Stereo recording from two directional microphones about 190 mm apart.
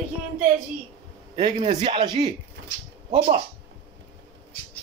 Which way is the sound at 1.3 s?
30° right (ahead or behind).